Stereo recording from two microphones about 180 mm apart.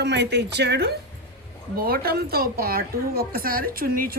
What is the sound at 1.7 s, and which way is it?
Speech, 55° right (ahead or behind).